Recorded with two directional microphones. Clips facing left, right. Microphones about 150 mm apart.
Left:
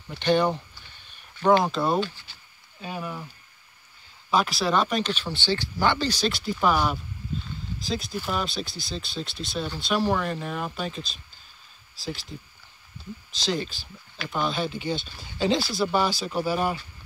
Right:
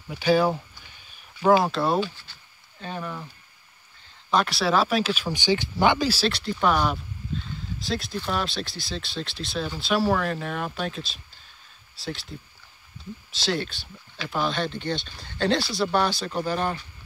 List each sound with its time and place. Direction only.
0.1 s speech: 5° right (ahead or behind)
4.3 s speech: centre (ahead or behind)